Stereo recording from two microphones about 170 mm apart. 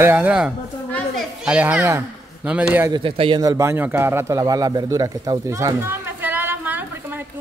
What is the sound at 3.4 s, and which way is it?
A man's voice, 20° right (ahead or behind).